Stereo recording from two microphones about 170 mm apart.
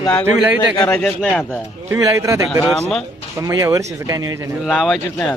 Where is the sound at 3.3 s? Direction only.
20° right (ahead or behind).